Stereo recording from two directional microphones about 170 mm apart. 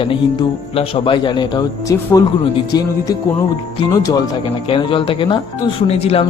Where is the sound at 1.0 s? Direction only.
30° left (ahead or behind).